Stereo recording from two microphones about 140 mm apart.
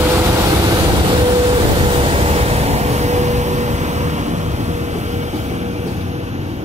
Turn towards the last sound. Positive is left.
turn(degrees=-55)  # may be behind; listen again after turning